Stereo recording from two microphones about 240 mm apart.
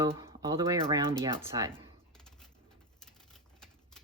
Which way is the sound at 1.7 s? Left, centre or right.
Centre.